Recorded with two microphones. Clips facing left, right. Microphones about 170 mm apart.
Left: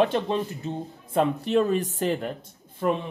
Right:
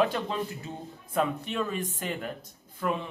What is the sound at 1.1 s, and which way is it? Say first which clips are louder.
Speech: left 7 dB; 35° left (ahead or behind).